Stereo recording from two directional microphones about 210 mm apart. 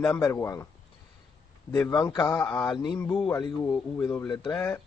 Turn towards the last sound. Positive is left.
turn(degrees=10)  # may be behind; listen again after turning